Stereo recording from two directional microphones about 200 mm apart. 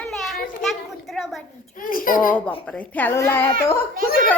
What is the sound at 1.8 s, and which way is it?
Babbling, 45° left (ahead or behind).